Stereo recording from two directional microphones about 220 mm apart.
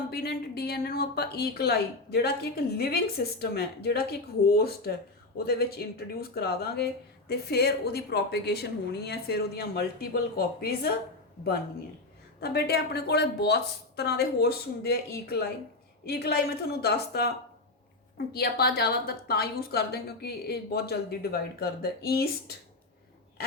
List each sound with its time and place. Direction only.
0.1 s a woman's voice: 45° left (ahead or behind)
12.4 s a woman's voice: 45° left (ahead or behind)
18.3 s a woman's voice: 45° left (ahead or behind)